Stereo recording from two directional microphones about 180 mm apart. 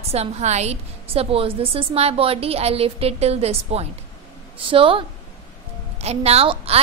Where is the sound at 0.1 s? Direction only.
35° right (ahead or behind).